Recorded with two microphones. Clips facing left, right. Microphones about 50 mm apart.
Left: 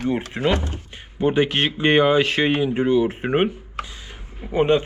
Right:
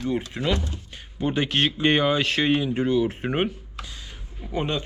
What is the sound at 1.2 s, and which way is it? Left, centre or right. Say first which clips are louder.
Speech: left 4 dB; centre.